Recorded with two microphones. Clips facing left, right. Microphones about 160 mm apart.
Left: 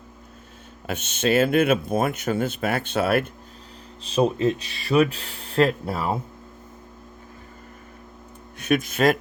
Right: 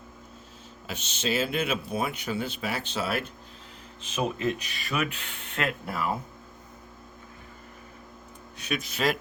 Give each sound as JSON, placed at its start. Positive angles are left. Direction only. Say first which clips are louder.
{"t": 0.9, "sound": "speech", "louder": "left 8 dB", "side_deg": 55}
{"t": 4.0, "sound": "speech", "louder": "left 8 dB", "side_deg": 30}
{"t": 8.5, "sound": "speech", "louder": "left 9 dB", "side_deg": 50}